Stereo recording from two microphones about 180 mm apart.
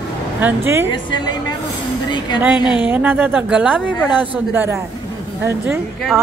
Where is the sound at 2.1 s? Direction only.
25° left (ahead or behind).